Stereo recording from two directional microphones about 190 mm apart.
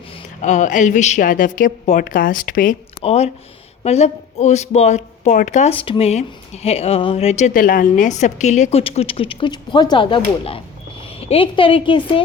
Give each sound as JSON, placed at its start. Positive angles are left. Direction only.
{"t": 0.4, "sound": "a woman's voice", "side_deg": 40}
{"t": 3.0, "sound": "a woman's voice", "side_deg": 30}